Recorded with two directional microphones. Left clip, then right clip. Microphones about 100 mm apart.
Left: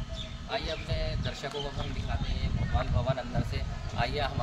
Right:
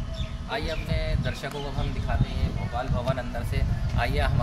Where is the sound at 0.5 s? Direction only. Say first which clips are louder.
Right 3 dB; 20° right (ahead or behind).